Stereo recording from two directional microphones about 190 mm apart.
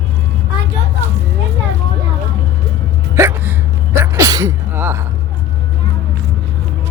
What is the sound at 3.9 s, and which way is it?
Sneeze, 15° right (ahead or behind).